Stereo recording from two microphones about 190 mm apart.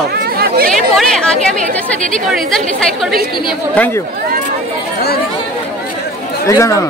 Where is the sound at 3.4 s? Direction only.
5° left (ahead or behind).